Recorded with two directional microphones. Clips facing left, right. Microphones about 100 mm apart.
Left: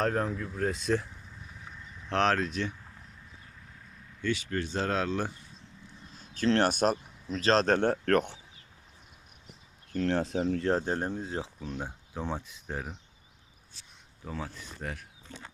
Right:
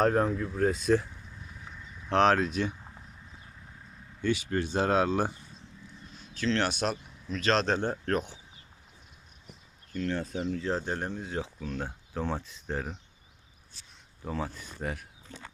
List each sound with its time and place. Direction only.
0.0 s speech: 5° right (ahead or behind)
4.2 s speech: 15° right (ahead or behind)
6.3 s speech: 50° left (ahead or behind)
7.3 s speech: 35° left (ahead or behind)
7.7 s speech: 70° left (ahead or behind)
10.1 s speech: 90° left
10.5 s speech: 60° left (ahead or behind)
10.8 s speech: 35° left (ahead or behind)
11.8 s speech: 10° left (ahead or behind)
14.3 s speech: 5° right (ahead or behind)